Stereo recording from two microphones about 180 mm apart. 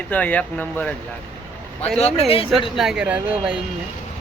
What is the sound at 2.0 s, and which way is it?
Speech, 35° left (ahead or behind).